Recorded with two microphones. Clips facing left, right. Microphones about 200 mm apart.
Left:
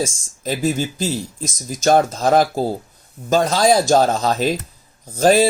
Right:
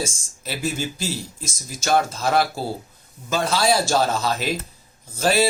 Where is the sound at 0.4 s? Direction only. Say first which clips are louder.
Left 6 dB; 40° left (ahead or behind).